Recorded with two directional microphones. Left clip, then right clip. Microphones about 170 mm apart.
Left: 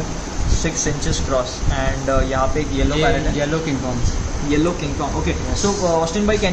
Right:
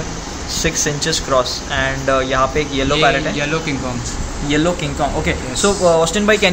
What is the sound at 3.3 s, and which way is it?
Speech, 20° left (ahead or behind).